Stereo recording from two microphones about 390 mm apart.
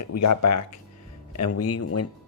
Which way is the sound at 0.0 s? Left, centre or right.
Left.